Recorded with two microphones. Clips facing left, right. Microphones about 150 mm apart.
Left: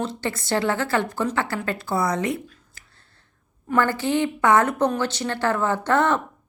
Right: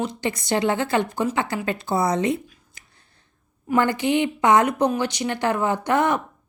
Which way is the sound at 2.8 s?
20° right (ahead or behind).